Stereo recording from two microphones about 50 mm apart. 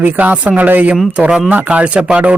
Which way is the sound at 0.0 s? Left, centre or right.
Right.